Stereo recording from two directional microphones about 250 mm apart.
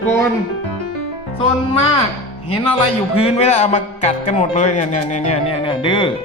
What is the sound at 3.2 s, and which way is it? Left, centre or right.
Speech, left.